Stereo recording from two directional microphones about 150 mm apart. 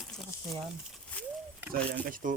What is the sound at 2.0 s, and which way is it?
Speech, 65° right (ahead or behind).